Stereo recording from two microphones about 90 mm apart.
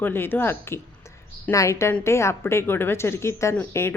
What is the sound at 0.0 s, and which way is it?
A woman's voice, 25° left (ahead or behind).